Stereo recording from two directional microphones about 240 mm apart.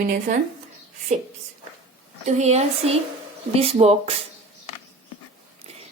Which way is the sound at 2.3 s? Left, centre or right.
Right.